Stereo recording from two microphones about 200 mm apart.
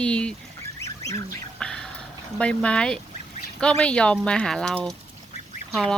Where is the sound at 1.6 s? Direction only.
5° left (ahead or behind).